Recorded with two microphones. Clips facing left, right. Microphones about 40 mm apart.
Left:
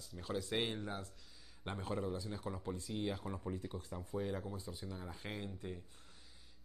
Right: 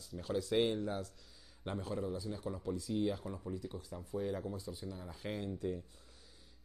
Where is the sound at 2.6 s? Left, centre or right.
Left.